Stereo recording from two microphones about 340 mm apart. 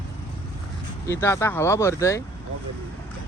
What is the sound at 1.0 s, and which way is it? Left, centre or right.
Speech, centre.